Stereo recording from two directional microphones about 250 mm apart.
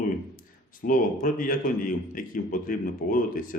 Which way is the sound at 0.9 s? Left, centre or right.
Left.